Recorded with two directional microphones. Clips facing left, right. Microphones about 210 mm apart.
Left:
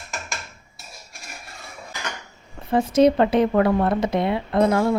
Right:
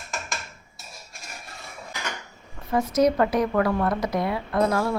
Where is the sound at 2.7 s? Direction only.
30° left (ahead or behind).